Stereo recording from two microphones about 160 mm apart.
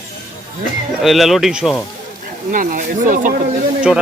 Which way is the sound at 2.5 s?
60° right (ahead or behind).